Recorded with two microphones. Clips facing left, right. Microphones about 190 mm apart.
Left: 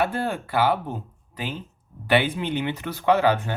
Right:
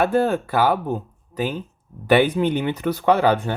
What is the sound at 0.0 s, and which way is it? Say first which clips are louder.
Speech: right 6 dB; 45° right (ahead or behind).